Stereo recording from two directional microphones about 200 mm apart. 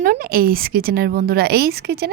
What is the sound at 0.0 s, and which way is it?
Speech, 45° right (ahead or behind).